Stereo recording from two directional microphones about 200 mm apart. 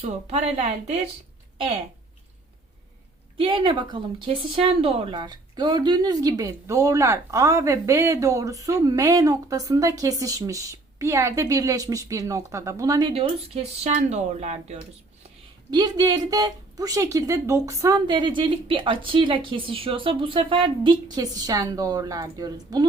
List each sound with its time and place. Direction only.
0.0 s speech: 35° right (ahead or behind)
3.3 s speech: 25° right (ahead or behind)
15.7 s speech: 20° right (ahead or behind)